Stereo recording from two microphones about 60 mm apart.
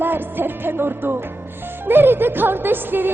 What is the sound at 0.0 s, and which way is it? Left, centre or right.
Music, right.